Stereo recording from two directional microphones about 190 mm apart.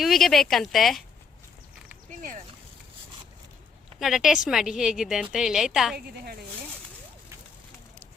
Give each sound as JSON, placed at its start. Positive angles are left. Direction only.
{"t": 0.0, "sound": "a woman's voice", "side_deg": 0}
{"t": 2.0, "sound": "a sound", "side_deg": -45}
{"t": 4.0, "sound": "a woman's voice", "side_deg": 0}